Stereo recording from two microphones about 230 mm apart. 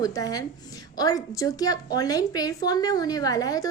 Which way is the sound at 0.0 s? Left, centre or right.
Centre.